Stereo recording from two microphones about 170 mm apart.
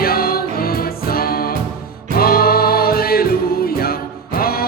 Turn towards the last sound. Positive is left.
turn(degrees=60)  # may be behind; listen again after turning